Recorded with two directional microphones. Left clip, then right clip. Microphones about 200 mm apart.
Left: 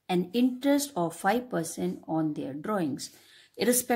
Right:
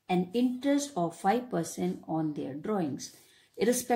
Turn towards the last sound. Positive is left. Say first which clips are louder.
# left 1 dB
turn(degrees=30)  # may be behind; listen again after turning